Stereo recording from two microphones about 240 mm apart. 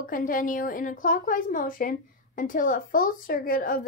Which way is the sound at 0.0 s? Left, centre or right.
Left.